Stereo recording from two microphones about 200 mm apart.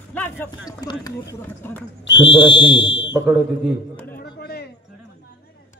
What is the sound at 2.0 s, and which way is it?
Speech, 65° left (ahead or behind).